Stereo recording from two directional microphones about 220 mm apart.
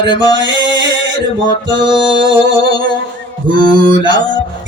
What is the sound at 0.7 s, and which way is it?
Male singing, 55° right (ahead or behind).